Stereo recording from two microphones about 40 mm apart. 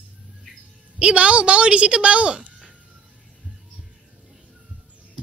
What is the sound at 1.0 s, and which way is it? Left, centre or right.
A woman's voice, right.